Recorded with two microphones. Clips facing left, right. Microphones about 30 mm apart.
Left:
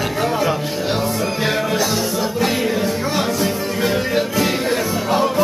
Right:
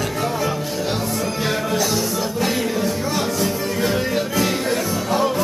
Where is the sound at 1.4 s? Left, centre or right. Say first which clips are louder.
Left 2 dB; centre.